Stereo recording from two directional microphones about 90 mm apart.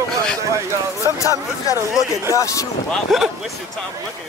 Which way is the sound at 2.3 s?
35° left (ahead or behind).